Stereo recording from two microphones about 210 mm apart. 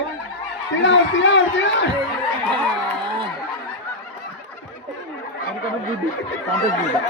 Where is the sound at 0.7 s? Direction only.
60° left (ahead or behind).